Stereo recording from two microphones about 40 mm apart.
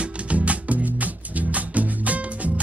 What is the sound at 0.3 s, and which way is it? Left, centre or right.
Music, right.